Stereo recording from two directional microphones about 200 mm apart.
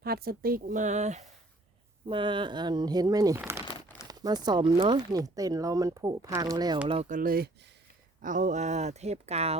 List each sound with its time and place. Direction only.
0.0 s speech: 50° right (ahead or behind)
2.0 s speech: 25° right (ahead or behind)
7.1 s speech: 45° right (ahead or behind)